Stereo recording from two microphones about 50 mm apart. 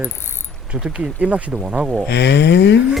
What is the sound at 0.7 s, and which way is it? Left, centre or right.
Speech, right.